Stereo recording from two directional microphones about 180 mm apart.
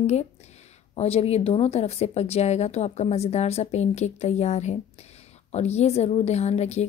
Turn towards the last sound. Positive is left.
turn(degrees=40)  # may be behind; listen again after turning